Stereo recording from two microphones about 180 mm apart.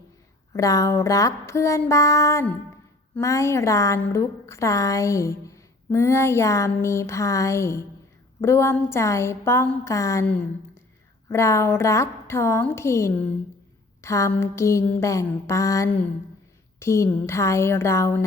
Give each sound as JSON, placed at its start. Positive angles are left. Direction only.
{"t": 0.5, "sound": "a woman's voice", "side_deg": 20}